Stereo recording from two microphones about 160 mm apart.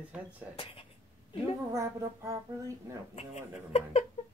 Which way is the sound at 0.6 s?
35° left (ahead or behind).